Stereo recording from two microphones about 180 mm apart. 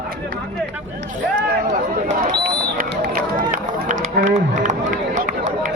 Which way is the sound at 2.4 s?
55° right (ahead or behind).